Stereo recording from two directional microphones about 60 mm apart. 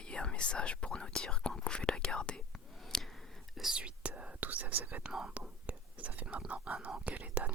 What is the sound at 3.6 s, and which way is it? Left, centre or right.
Speech, centre.